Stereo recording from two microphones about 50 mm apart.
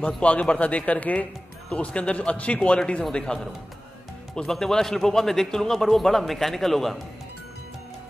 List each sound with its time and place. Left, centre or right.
0.0 s a man's voice: left
4.4 s a man's voice: centre